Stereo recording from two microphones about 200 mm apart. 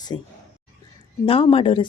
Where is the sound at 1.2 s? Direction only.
30° left (ahead or behind).